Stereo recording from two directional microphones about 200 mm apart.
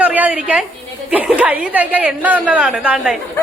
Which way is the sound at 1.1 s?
5° right (ahead or behind).